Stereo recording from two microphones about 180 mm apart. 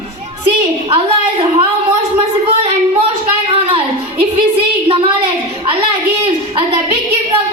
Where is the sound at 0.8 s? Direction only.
30° right (ahead or behind).